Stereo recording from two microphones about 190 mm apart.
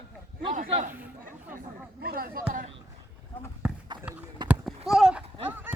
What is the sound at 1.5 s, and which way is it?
Speech, 55° right (ahead or behind).